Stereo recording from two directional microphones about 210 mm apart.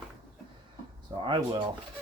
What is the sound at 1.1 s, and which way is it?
Speech, 25° right (ahead or behind).